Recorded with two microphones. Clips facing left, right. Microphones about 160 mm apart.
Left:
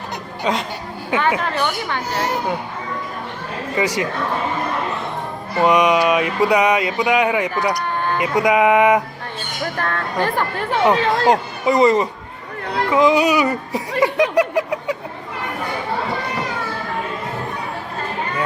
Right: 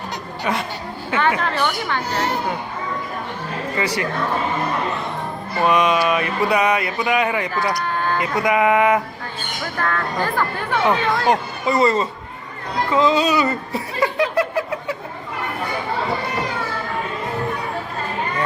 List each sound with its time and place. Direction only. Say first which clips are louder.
0.5 s speech: left 2 dB; 20° left (ahead or behind)
1.1 s mantra: left 1 dB; 15° left (ahead or behind)
3.8 s mantra: left 3 dB; 15° left (ahead or behind)
5.5 s mantra: left 2 dB; 15° left (ahead or behind)
10.2 s speech: left 2 dB; 25° left (ahead or behind)
10.8 s mantra: left 3 dB; 20° left (ahead or behind)
14.0 s a sound: left 3 dB; 15° left (ahead or behind)